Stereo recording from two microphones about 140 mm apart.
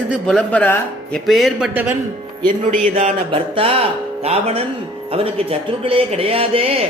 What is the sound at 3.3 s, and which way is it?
Speech, 45° right (ahead or behind).